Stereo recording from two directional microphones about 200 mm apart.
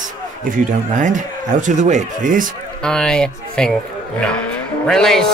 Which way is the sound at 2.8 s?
5° left (ahead or behind).